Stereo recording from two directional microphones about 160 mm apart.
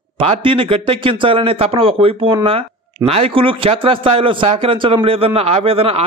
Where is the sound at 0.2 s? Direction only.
35° right (ahead or behind).